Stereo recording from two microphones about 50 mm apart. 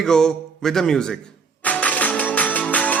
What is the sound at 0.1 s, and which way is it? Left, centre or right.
Speech, centre.